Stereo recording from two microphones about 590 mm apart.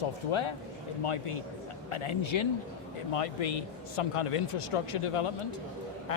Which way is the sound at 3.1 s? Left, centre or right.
Left.